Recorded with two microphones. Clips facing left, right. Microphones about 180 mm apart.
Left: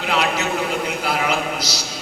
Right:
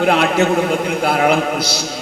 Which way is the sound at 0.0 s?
55° right (ahead or behind).